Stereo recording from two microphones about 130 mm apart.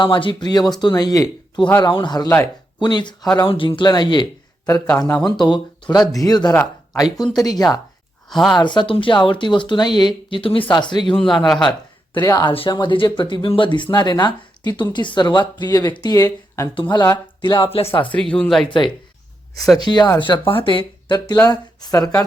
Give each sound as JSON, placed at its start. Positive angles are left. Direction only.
{"t": 0.0, "sound": "speech", "side_deg": 40}
{"t": 5.2, "sound": "speech", "side_deg": 35}
{"t": 8.3, "sound": "speech", "side_deg": 0}
{"t": 8.5, "sound": "speech", "side_deg": 35}
{"t": 11.1, "sound": "speech", "side_deg": 5}
{"t": 12.2, "sound": "speech", "side_deg": 30}
{"t": 18.0, "sound": "speech", "side_deg": 10}
{"t": 19.9, "sound": "speech", "side_deg": 35}